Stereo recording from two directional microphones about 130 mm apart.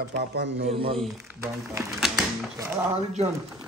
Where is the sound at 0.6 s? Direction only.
50° right (ahead or behind).